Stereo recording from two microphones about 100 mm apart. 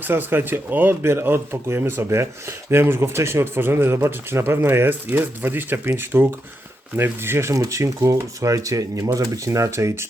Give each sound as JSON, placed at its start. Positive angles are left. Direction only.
{"t": 0.0, "sound": "speech", "side_deg": -20}